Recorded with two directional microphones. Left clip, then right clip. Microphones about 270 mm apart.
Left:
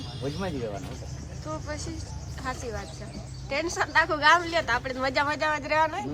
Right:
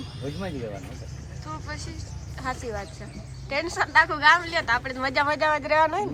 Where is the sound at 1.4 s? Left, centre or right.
Centre.